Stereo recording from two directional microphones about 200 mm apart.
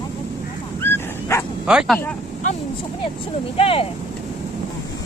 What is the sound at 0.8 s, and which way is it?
Dog, 10° left (ahead or behind).